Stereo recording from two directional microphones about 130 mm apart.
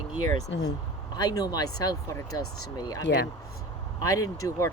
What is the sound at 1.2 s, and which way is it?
Speech, 30° left (ahead or behind).